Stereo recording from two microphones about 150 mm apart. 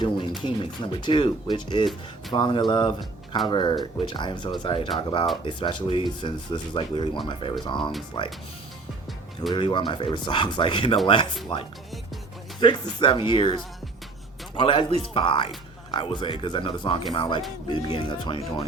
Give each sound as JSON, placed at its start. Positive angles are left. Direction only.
{"t": 0.0, "sound": "a man's voice", "side_deg": 30}
{"t": 3.0, "sound": "speech", "side_deg": 0}
{"t": 3.5, "sound": "a man's voice", "side_deg": 30}
{"t": 9.6, "sound": "a man's voice", "side_deg": 30}